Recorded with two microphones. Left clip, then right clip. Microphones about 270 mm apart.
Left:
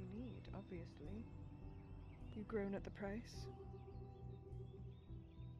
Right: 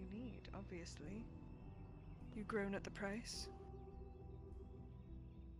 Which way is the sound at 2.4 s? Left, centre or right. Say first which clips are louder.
Right 2 dB; right.